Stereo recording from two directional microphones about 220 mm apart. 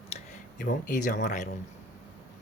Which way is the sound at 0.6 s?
35° left (ahead or behind).